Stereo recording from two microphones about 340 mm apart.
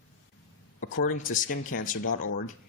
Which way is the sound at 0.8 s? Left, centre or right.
Left.